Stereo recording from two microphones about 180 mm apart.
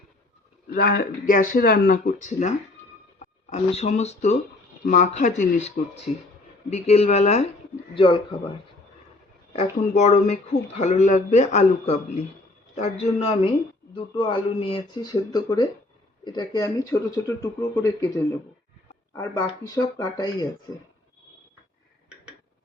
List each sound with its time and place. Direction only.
0.7 s speech: 55° left (ahead or behind)
3.5 s a man's voice: 40° left (ahead or behind)
6.7 s a man's voice: 35° left (ahead or behind)
9.5 s a man's voice: 40° left (ahead or behind); by 20.5 s 20° left (ahead or behind)